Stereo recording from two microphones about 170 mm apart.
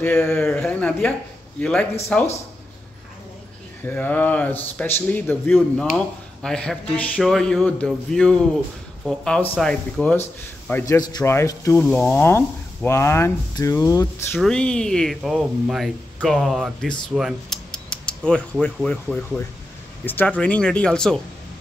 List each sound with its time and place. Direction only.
0.0 s speech: 10° left (ahead or behind)
3.8 s speech: 10° left (ahead or behind)
10.7 s speech: 15° left (ahead or behind)
11.8 s speech: 5° left (ahead or behind)
14.4 s speech: 5° left (ahead or behind)
17.1 s a sound: centre (ahead or behind)
20.1 s speech: 10° left (ahead or behind)